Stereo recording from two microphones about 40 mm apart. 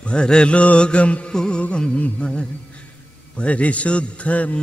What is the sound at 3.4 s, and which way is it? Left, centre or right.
A man's voice, left.